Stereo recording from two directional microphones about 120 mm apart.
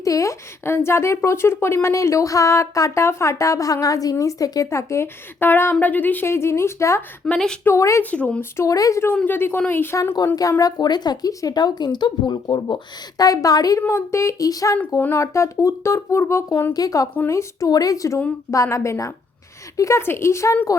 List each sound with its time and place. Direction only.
0.0 s speech: 25° left (ahead or behind)
7.3 s a woman's voice: 5° left (ahead or behind)
7.6 s speech: 25° left (ahead or behind)
8.1 s speech: 10° left (ahead or behind)
8.5 s speech: 30° left (ahead or behind)
14.8 s speech: 15° left (ahead or behind)